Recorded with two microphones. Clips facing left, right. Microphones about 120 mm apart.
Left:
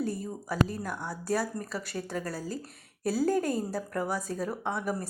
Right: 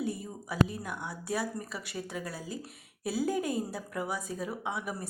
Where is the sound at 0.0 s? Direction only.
45° left (ahead or behind).